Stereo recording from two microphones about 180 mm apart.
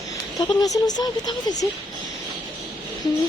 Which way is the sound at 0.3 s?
20° left (ahead or behind).